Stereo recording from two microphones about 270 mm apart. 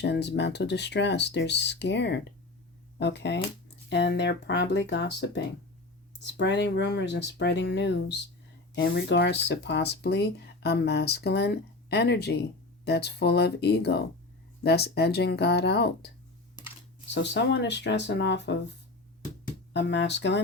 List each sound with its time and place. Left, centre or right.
0.0 s speech: left
19.7 s speech: left